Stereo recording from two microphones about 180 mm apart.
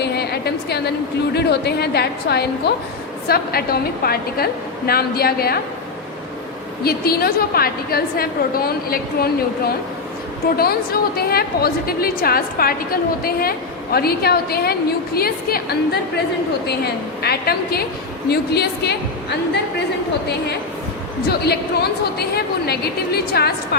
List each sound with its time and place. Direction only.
0.0 s a woman's voice: 65° left (ahead or behind)
6.8 s a woman's voice: 60° left (ahead or behind)
16.6 s a woman's voice: 65° left (ahead or behind)
21.2 s a woman's voice: 65° left (ahead or behind)